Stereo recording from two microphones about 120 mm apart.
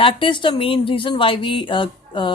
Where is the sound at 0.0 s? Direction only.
45° left (ahead or behind).